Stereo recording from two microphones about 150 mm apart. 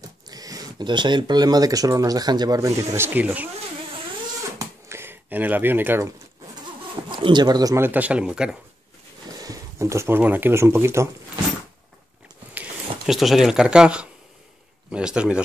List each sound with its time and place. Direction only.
0.3 s speech: 25° right (ahead or behind)
4.6 s a sound: 15° right (ahead or behind)
7.1 s speech: 30° right (ahead or behind); by 8.5 s 5° right (ahead or behind)
9.4 s speech: 20° right (ahead or behind)
12.5 s speech: centre (ahead or behind)